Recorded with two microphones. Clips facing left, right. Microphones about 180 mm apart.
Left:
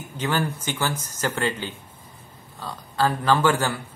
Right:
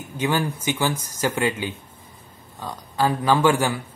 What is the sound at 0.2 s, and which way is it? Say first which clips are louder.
A man's voice: right 2 dB; 10° right (ahead or behind).